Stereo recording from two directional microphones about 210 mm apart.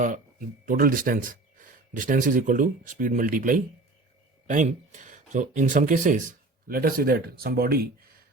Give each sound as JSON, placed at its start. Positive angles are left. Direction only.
{"t": 0.0, "sound": "speech", "side_deg": -40}